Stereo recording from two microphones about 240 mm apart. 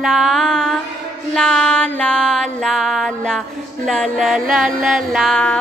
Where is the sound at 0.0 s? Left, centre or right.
Centre.